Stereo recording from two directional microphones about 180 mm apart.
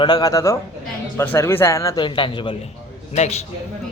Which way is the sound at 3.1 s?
40° left (ahead or behind).